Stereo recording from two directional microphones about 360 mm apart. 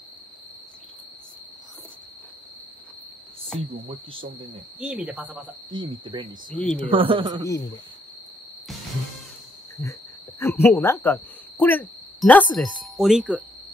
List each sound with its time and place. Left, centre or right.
3.7 s speech: centre
4.7 s speech: centre
6.5 s speech: centre
6.9 s speech: centre
7.4 s speech: centre
10.4 s speech: centre